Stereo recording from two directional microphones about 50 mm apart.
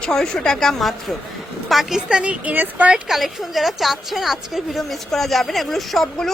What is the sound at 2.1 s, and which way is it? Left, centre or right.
Speech, right.